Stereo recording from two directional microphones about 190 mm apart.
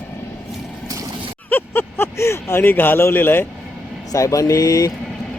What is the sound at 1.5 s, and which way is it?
Vehicle, 10° left (ahead or behind).